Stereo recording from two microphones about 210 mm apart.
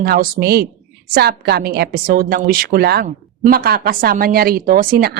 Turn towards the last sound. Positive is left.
turn(degrees=-45)  # may be behind; listen again after turning